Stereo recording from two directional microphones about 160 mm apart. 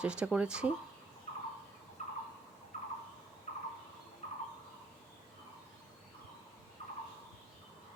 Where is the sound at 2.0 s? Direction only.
50° left (ahead or behind).